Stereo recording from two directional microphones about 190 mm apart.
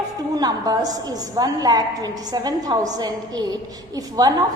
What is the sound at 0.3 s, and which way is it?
A woman's voice, 20° right (ahead or behind).